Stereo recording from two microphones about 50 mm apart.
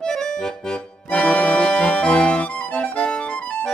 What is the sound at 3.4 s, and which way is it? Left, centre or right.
Music, left.